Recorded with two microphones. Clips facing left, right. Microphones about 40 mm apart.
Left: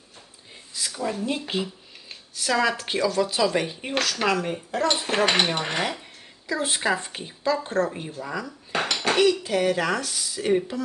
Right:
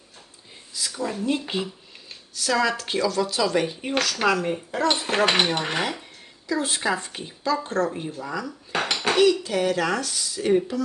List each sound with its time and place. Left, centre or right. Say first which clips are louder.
0.7 s a sound: right 1 dB; left
0.9 s speech: right 2 dB; centre
2.0 s a sound: right 1 dB; centre
2.5 s speech: even; centre
6.5 s speech: even; centre
7.9 s speech: right 2 dB; centre
8.7 s dishes: even; centre
9.5 s speech: even; centre